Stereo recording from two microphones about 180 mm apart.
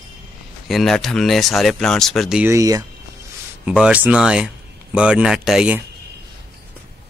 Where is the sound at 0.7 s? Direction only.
Centre (ahead or behind).